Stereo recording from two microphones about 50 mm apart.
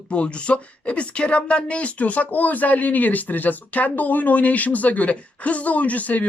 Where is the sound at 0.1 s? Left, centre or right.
Left.